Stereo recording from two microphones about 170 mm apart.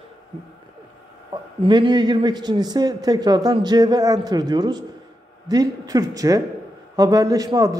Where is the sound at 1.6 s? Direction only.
25° right (ahead or behind).